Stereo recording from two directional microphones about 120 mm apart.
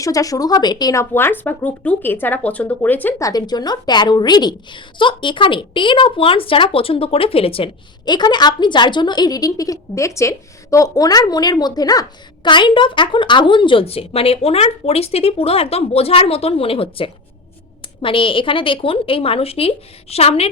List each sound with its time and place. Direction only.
0.0 s a woman's voice: 30° left (ahead or behind)
1.1 s speech: 15° left (ahead or behind)
3.2 s a woman's voice: 30° left (ahead or behind); by 7.7 s 50° left (ahead or behind)
8.0 s a woman's voice: 40° left (ahead or behind); by 20.5 s 55° left (ahead or behind)